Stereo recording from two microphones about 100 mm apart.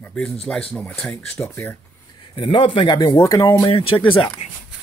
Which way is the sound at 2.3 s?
60° left (ahead or behind).